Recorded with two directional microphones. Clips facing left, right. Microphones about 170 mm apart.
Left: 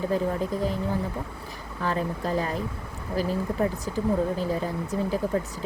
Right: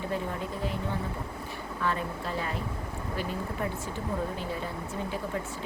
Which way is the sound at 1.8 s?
40° left (ahead or behind).